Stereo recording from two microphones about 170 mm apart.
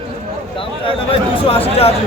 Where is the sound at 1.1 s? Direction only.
35° left (ahead or behind).